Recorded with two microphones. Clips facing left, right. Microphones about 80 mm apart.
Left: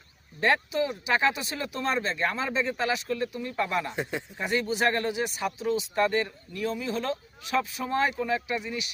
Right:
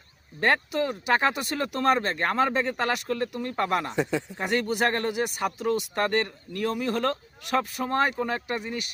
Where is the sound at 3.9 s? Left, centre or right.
Right.